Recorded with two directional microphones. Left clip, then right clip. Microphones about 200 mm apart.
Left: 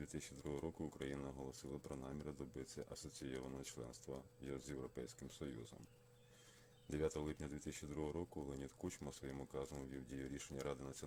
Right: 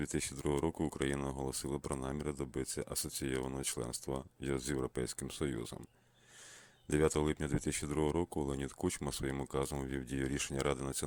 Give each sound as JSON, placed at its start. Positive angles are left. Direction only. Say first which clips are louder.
{"t": 0.0, "sound": "speech", "louder": "right 13 dB", "side_deg": -40}
{"t": 6.8, "sound": "speech", "louder": "right 11 dB", "side_deg": -35}